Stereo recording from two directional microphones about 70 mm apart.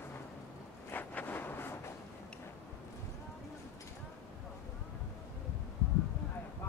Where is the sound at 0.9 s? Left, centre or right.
Left.